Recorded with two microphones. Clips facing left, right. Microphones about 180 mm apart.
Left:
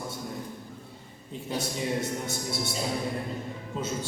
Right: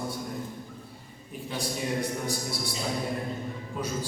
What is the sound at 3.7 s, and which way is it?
Speech, 25° left (ahead or behind).